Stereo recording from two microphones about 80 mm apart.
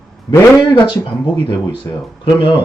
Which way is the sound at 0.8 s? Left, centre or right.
Left.